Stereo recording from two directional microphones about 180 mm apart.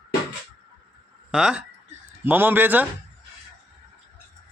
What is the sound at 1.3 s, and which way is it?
A man's voice, centre (ahead or behind).